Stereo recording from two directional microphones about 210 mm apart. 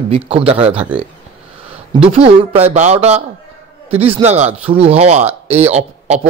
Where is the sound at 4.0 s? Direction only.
25° right (ahead or behind).